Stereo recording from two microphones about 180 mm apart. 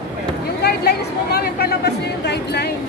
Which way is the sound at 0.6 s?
60° left (ahead or behind).